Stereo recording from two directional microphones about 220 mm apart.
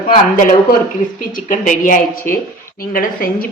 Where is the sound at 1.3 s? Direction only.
35° left (ahead or behind).